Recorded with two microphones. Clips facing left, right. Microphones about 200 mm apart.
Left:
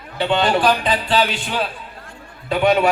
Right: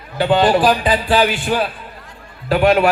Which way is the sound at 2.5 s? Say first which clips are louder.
Right 3 dB; 5° right (ahead or behind).